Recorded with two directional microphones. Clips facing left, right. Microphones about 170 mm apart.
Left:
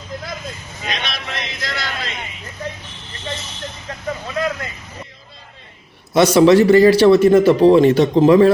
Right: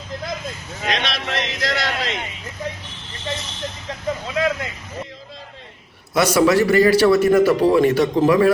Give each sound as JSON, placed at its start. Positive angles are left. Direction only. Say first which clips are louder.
{"t": 0.8, "sound": "a man's voice", "louder": "right 4 dB", "side_deg": -85}
{"t": 6.1, "sound": "speech", "louder": "left 5 dB", "side_deg": 20}